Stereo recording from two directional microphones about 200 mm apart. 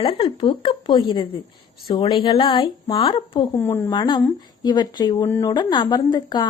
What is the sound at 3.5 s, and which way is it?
A woman's voice, 10° left (ahead or behind).